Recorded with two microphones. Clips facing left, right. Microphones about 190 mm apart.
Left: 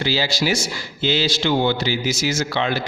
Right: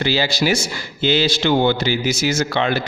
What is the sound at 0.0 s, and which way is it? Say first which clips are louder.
Speech: right 3 dB; 55° right (ahead or behind).